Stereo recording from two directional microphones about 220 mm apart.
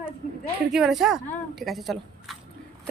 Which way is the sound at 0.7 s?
Centre (ahead or behind).